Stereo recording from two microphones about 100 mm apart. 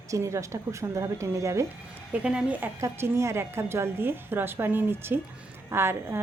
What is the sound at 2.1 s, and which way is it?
Speech, 10° right (ahead or behind).